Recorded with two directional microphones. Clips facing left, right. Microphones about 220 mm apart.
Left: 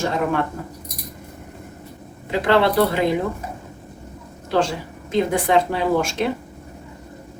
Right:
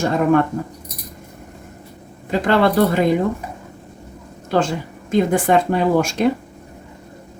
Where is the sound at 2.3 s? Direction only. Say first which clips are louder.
Right 1 dB; 45° right (ahead or behind).